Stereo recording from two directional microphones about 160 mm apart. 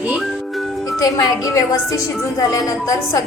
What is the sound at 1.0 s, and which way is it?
A woman's voice, 25° left (ahead or behind).